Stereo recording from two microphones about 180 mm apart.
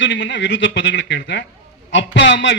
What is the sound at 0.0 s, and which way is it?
A man's voice, 85° left.